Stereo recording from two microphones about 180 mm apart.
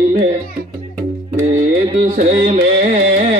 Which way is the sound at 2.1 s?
40° right (ahead or behind).